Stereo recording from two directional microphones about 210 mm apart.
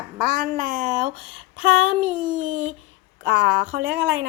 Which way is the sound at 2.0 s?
30° right (ahead or behind).